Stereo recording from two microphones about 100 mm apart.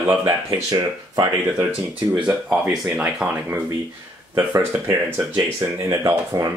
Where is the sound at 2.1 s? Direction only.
10° right (ahead or behind).